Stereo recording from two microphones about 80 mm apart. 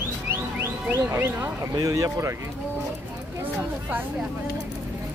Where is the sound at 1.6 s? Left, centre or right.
Right.